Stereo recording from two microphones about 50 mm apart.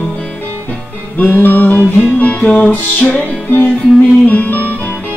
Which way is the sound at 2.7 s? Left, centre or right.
Left.